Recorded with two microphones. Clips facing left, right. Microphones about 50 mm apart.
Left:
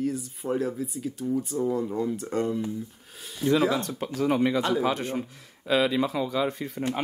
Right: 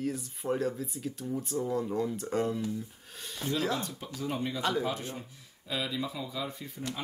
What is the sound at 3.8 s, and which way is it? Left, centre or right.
Speech, left.